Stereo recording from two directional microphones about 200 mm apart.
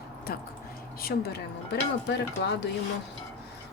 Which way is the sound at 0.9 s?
50° left (ahead or behind).